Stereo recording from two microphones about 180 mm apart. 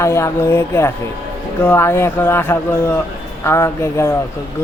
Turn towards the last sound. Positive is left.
turn(degrees=15)  # may be behind; listen again after turning